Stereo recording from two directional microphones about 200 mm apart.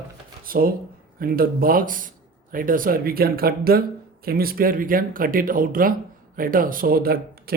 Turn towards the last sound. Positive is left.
turn(degrees=-50)  # may be behind; listen again after turning